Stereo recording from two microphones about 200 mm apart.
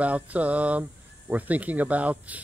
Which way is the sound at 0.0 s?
5° right (ahead or behind).